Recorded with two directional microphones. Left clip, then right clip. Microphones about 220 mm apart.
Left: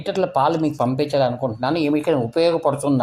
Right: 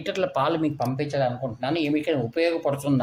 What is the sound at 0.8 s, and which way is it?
Speech, 30° left (ahead or behind).